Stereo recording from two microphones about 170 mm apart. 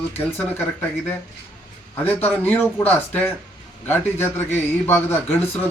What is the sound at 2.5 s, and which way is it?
A man's voice, 10° left (ahead or behind).